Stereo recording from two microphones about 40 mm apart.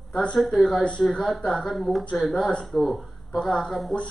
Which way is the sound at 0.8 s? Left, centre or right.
Left.